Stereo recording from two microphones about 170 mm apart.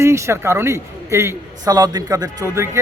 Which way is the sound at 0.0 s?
15° right (ahead or behind).